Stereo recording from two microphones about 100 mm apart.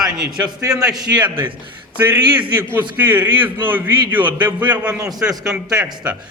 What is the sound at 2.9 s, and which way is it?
A man's voice, 20° right (ahead or behind).